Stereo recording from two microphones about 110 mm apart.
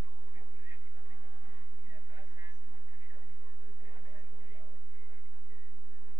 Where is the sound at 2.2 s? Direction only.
30° right (ahead or behind).